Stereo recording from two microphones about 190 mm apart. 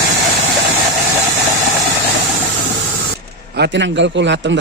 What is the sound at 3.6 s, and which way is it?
Speech, 65° right (ahead or behind).